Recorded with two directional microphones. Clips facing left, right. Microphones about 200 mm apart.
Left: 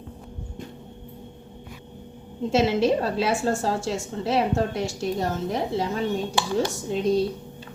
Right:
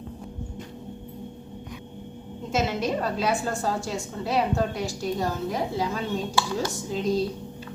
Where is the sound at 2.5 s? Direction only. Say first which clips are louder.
Left 5 dB; 30° left (ahead or behind).